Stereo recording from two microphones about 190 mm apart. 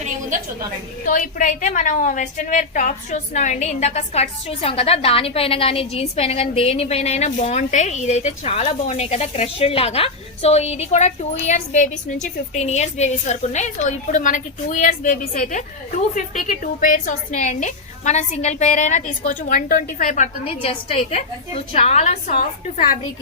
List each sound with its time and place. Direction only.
1.0 s a woman's voice: 45° left (ahead or behind)